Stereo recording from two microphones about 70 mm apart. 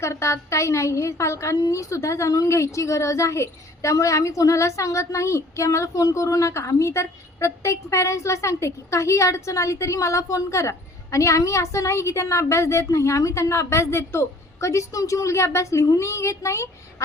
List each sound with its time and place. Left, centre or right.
0.0 s a woman's voice: left